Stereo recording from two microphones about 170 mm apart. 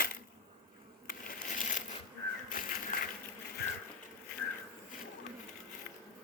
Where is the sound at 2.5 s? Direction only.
55° left (ahead or behind).